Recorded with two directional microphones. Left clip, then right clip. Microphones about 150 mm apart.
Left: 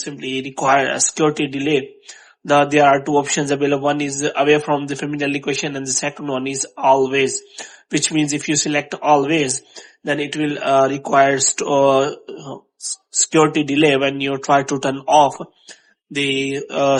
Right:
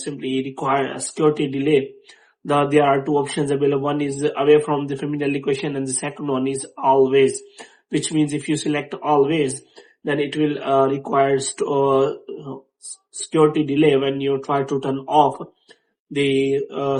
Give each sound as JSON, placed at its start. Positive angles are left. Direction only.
{"t": 0.0, "sound": "speech", "side_deg": 40}
{"t": 13.3, "sound": "speech", "side_deg": 50}
{"t": 16.7, "sound": "speech", "side_deg": 60}